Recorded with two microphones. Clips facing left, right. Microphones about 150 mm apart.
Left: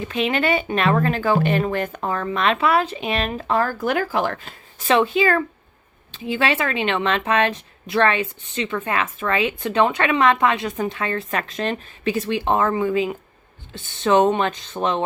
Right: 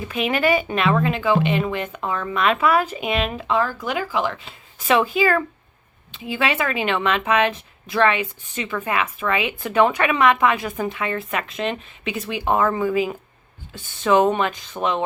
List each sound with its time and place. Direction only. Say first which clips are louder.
0.1 s speech: right 1 dB; 30° left (ahead or behind); by 4.5 s 50° left (ahead or behind)
4.9 s a woman's voice: left 1 dB; 30° left (ahead or behind)
14.0 s speech: left 1 dB; 30° left (ahead or behind)